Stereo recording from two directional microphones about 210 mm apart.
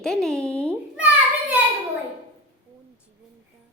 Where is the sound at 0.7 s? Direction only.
5° right (ahead or behind).